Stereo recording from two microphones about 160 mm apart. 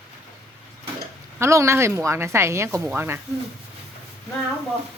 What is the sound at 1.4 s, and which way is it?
Speech, 15° right (ahead or behind).